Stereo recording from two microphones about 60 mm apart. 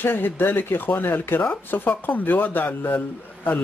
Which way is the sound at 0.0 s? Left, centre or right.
Left.